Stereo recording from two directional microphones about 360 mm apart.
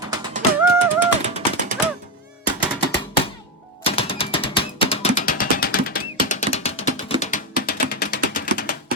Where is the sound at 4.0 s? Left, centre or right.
Centre.